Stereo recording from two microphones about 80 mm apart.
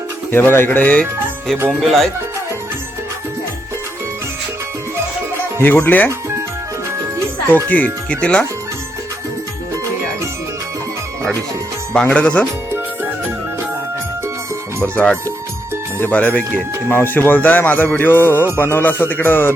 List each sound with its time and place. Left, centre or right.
0.3 s speech: left
1.8 s speech: centre
5.5 s speech: left
7.5 s speech: centre
12.1 s speech: centre
12.7 s music: right
14.9 s speech: left